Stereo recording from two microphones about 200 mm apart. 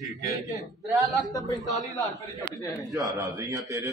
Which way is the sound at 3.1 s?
15° right (ahead or behind).